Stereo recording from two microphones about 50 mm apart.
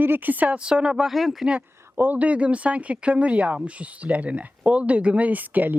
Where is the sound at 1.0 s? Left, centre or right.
Centre.